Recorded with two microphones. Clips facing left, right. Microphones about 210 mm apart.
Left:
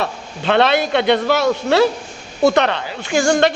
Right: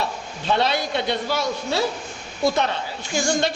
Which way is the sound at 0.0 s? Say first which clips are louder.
Left 5 dB; 70° left (ahead or behind).